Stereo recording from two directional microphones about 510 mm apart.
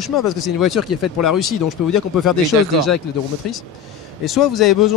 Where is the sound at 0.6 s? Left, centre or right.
Left.